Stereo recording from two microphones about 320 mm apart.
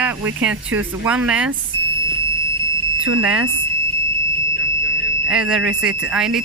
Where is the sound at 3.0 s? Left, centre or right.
Right.